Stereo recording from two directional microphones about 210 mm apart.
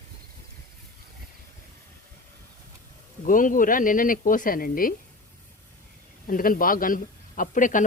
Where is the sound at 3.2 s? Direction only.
40° left (ahead or behind).